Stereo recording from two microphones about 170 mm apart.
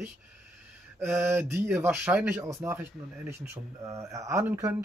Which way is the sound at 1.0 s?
15° right (ahead or behind).